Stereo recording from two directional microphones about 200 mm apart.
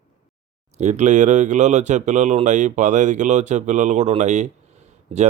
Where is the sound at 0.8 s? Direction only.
35° right (ahead or behind).